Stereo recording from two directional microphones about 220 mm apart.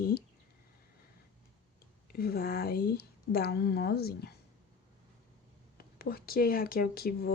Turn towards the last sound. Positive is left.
turn(degrees=45)  # may be behind; listen again after turning